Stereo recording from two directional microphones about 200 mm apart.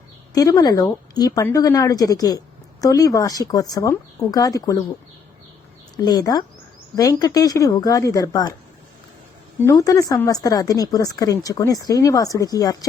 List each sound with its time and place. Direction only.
0.3 s speech: 20° left (ahead or behind)
6.0 s speech: 20° left (ahead or behind)
9.6 s speech: 15° left (ahead or behind)